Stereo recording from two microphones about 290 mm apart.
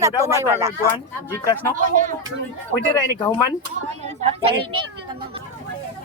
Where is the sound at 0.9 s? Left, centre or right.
Centre.